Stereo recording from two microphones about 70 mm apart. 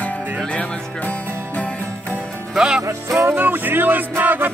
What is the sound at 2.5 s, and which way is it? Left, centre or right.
Music, centre.